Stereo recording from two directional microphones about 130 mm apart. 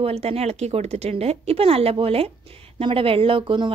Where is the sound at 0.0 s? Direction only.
50° right (ahead or behind).